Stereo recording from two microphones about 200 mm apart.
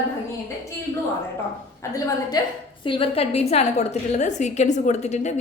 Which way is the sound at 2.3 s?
20° left (ahead or behind).